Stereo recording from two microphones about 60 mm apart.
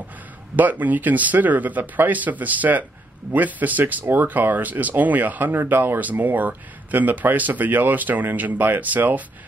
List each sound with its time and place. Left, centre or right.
0.6 s speech: right